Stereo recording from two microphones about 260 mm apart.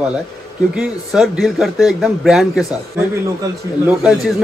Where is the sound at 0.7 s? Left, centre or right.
Centre.